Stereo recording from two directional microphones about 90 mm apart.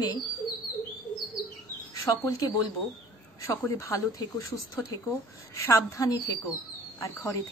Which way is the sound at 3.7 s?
35° left (ahead or behind).